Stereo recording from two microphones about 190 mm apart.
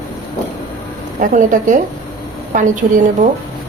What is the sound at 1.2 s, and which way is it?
A woman's voice, 40° right (ahead or behind).